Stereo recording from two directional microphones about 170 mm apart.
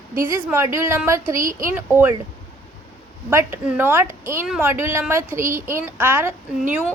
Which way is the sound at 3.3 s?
10° right (ahead or behind).